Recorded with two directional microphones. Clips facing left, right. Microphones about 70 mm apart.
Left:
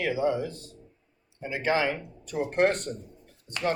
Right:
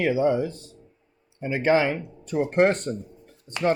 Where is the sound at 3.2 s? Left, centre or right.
Right.